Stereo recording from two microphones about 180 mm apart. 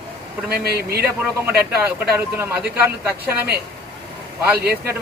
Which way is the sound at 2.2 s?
10° right (ahead or behind).